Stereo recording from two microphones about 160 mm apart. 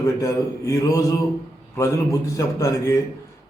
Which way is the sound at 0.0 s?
20° left (ahead or behind).